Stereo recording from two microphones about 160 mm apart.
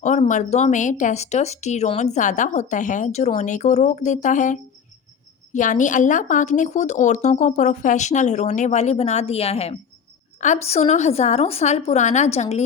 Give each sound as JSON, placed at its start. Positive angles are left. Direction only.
{"t": 0.0, "sound": "speech", "side_deg": 45}